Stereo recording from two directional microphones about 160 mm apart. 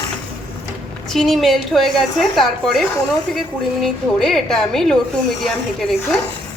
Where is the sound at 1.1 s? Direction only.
Centre (ahead or behind).